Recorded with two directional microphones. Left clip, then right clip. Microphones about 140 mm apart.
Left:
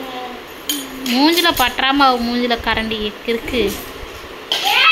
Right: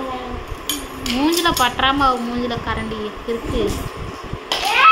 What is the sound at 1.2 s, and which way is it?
Speech, 20° left (ahead or behind).